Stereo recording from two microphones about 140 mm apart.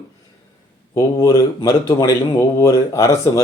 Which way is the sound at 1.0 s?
20° left (ahead or behind).